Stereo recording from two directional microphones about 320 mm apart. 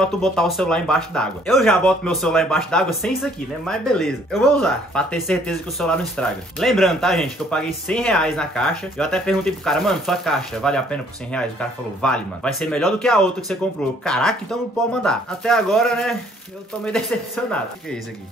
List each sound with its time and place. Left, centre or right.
0.0 s speech: centre